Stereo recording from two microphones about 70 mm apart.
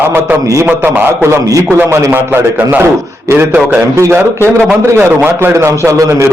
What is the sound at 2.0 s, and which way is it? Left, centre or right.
Speech, right.